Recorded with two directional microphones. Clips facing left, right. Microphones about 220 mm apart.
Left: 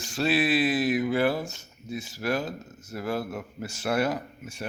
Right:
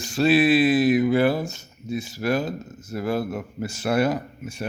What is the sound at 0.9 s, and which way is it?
Speech, 15° right (ahead or behind).